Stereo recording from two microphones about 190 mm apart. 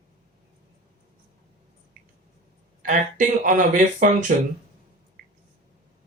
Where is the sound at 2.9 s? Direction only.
45° right (ahead or behind).